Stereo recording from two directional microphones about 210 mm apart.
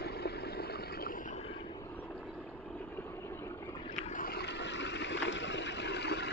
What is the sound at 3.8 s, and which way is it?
Boat, 30° left (ahead or behind).